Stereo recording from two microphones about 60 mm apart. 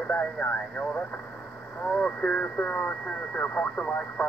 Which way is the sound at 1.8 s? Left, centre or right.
Left.